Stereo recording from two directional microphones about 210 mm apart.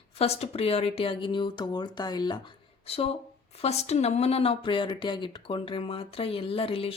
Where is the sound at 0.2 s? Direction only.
30° left (ahead or behind).